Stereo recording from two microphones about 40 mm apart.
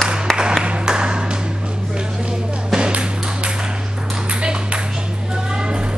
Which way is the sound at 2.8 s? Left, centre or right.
Right.